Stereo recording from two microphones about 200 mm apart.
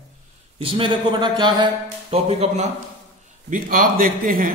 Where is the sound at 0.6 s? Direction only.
25° right (ahead or behind).